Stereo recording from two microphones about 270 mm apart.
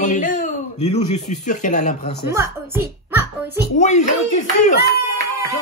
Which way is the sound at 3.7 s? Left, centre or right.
Left.